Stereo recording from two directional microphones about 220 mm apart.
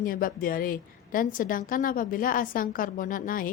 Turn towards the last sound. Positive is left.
turn(degrees=40)  # may be behind; listen again after turning